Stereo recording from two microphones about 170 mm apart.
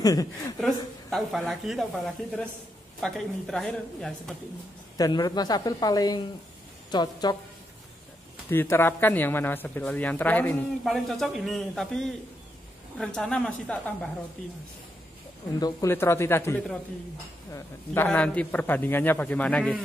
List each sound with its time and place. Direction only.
0.0 s speech: 20° left (ahead or behind)
1.1 s speech: centre (ahead or behind)
4.9 s speech: 25° left (ahead or behind)
8.5 s speech: 15° left (ahead or behind)
15.6 s speech: 15° left (ahead or behind)